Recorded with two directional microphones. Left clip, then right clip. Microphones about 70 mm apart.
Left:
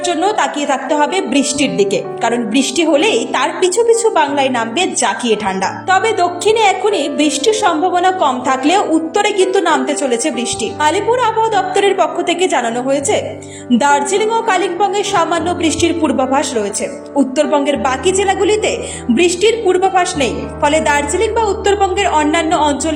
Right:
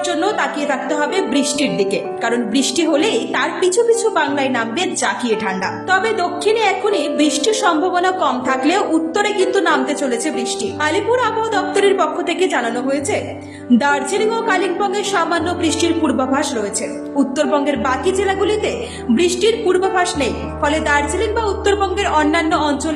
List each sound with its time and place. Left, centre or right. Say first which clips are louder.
0.1 s a woman's voice: left 5 dB; left
4.2 s a woman's voice: left 4 dB; left
12.9 s a woman's voice: left 8 dB; left
13.7 s a woman's voice: left 4 dB; left
17.7 s a woman's voice: left 3 dB; left